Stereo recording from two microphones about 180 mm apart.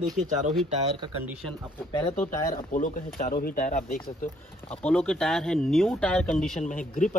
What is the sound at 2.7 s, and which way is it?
Speech, 45° left (ahead or behind).